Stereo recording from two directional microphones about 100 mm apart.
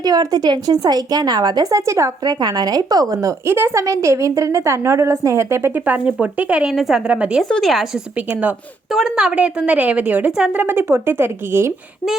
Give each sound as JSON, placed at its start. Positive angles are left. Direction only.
{"t": 0.0, "sound": "a woman's voice", "side_deg": -40}
{"t": 7.4, "sound": "a woman's voice", "side_deg": 0}
{"t": 8.1, "sound": "a woman's voice", "side_deg": -15}
{"t": 8.9, "sound": "a woman's voice", "side_deg": -5}